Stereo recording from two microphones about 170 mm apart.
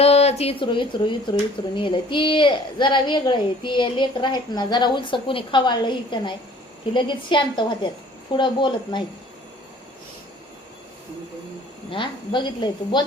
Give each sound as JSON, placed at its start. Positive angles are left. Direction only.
{"t": 0.0, "sound": "speech", "side_deg": 40}
{"t": 11.9, "sound": "speech", "side_deg": 30}